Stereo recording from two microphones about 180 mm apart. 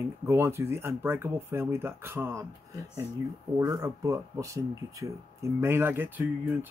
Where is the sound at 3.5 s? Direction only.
20° right (ahead or behind).